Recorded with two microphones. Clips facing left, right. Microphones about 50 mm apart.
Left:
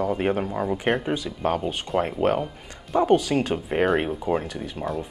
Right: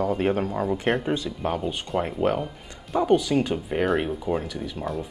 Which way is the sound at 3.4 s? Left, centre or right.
Left.